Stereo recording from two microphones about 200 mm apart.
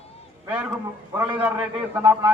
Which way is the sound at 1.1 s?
25° right (ahead or behind).